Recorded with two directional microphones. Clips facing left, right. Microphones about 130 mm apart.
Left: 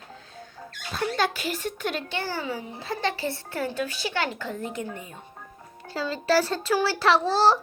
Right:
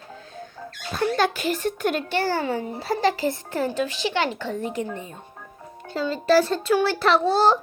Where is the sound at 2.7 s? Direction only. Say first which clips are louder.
Right 8 dB; 35° right (ahead or behind).